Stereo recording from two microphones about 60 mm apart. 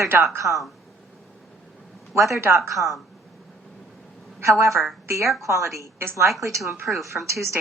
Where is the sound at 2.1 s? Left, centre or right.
Right.